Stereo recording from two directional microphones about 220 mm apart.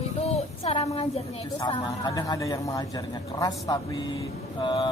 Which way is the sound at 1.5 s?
15° left (ahead or behind).